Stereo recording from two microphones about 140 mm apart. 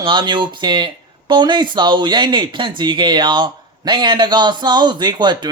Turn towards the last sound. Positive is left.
turn(degrees=-30)  # may be behind; listen again after turning